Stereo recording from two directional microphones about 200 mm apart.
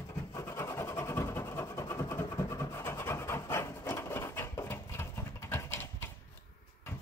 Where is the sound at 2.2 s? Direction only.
15° left (ahead or behind).